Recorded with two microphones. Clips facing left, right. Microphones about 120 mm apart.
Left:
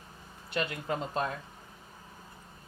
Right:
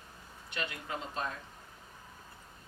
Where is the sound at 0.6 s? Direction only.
45° left (ahead or behind).